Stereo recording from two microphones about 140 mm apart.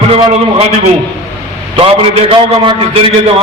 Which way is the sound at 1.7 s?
45° right (ahead or behind).